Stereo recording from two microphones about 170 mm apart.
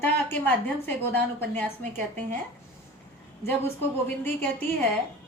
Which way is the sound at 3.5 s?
10° left (ahead or behind).